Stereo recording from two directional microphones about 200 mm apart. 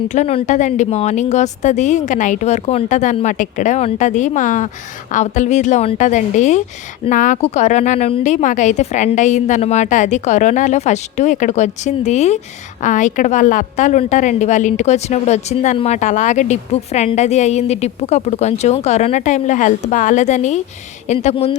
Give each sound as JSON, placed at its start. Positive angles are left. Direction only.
{"t": 0.1, "sound": "a woman's voice", "side_deg": 35}